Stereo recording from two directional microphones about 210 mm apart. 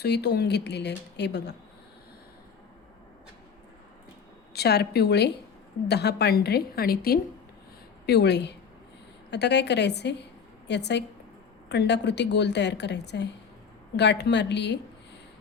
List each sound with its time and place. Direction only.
0.0 s speech: 50° left (ahead or behind)
4.5 s a woman's voice: 50° left (ahead or behind)